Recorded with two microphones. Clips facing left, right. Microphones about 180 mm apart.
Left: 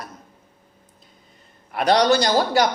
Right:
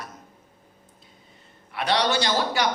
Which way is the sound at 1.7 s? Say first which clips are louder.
Left 7 dB; 45° left (ahead or behind).